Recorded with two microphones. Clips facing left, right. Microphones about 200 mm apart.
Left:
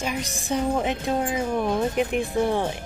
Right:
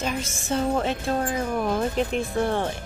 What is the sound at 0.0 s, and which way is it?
Speech, 15° left (ahead or behind).